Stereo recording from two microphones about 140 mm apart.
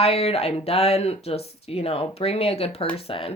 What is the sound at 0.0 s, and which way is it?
Speech, 45° left (ahead or behind).